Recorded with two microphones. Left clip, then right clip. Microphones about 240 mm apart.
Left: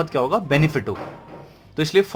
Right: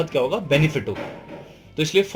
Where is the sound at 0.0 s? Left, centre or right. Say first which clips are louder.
Left 1 dB; left.